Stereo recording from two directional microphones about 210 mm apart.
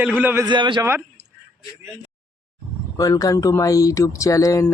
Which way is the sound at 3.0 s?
15° left (ahead or behind).